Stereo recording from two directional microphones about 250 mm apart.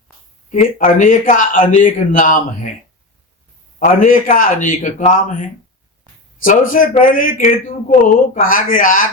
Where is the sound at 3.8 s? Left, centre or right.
Left.